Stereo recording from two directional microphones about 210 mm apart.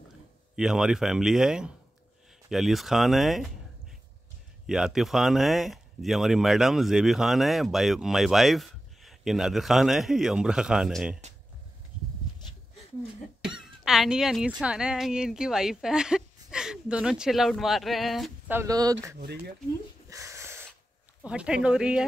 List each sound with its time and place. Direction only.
0.6 s speech: 5° right (ahead or behind)
4.6 s speech: centre (ahead or behind)
13.8 s speech: centre (ahead or behind)
18.6 s speech: 15° right (ahead or behind)
19.1 s speech: 50° right (ahead or behind)
20.1 s a sound: 15° right (ahead or behind)
21.2 s speech: 5° right (ahead or behind)